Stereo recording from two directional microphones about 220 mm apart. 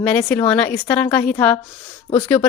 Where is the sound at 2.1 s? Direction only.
25° left (ahead or behind).